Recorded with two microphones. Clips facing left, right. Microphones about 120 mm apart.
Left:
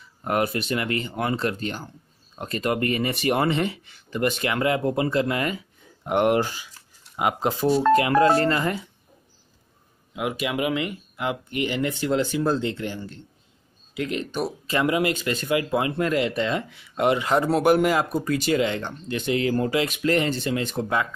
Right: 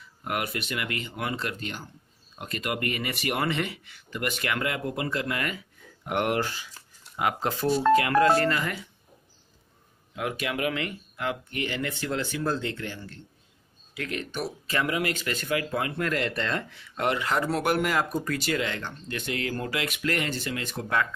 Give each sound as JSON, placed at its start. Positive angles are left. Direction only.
{"t": 0.2, "sound": "speech", "side_deg": 35}
{"t": 10.1, "sound": "speech", "side_deg": 15}